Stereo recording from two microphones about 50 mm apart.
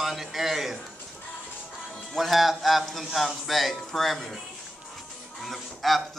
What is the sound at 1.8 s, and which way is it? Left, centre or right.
Speech, centre.